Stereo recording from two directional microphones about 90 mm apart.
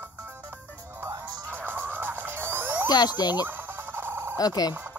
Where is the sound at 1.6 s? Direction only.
25° right (ahead or behind).